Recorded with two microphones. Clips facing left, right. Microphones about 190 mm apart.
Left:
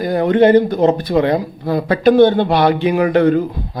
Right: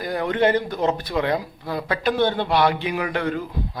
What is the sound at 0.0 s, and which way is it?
Speech, 35° left (ahead or behind).